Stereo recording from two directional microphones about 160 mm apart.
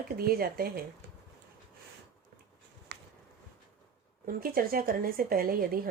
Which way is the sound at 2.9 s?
90° right.